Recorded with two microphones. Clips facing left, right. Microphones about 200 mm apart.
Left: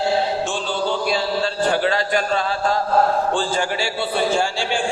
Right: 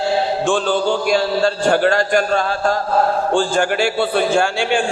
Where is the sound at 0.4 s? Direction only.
50° right (ahead or behind).